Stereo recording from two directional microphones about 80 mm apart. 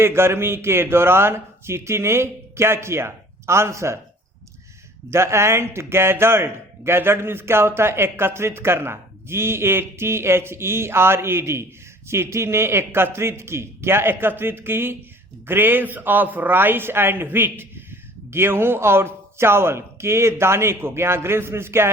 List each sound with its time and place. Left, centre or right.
0.0 s speech: right
5.1 s a man's voice: right